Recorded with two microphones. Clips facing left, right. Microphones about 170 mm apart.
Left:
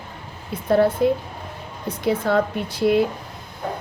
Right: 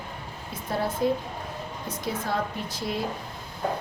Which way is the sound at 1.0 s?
65° left (ahead or behind).